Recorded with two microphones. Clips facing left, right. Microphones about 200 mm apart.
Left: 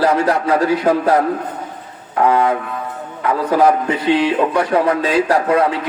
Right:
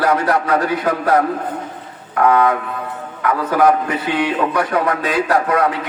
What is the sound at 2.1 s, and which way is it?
A man's voice, 25° left (ahead or behind).